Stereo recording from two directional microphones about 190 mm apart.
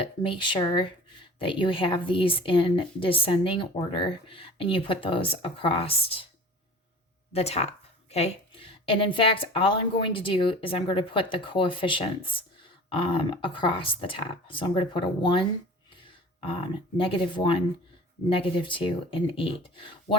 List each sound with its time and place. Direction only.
0.2 s speech: 25° left (ahead or behind)
7.3 s speech: 35° left (ahead or behind)